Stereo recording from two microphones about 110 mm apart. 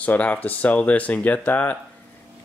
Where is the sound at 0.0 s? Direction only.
15° left (ahead or behind).